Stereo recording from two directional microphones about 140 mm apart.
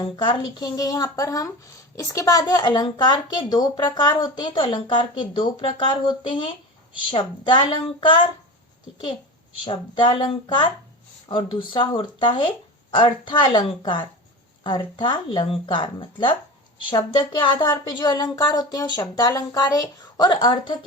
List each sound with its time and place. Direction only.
0.0 s a woman's voice: 35° left (ahead or behind)
9.6 s a woman's voice: 35° left (ahead or behind)